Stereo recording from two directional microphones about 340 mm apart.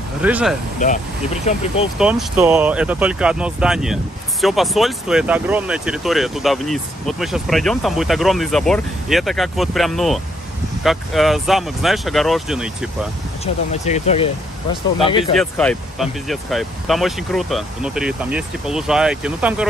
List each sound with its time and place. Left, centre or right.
0.2 s speech: centre
0.7 s speech: left
2.0 s speech: centre
13.8 s speech: centre
15.3 s speech: centre